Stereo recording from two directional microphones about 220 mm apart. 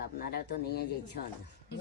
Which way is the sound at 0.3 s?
45° left (ahead or behind).